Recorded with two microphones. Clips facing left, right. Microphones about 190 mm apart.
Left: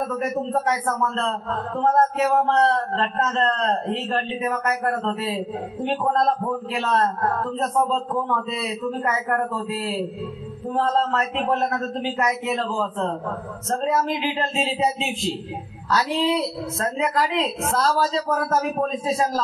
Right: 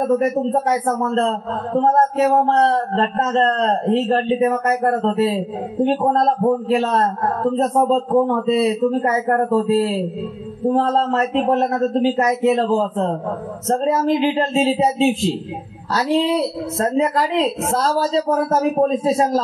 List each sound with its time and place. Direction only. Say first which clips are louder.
0.5 s a man's voice: right 5 dB; 35° right (ahead or behind)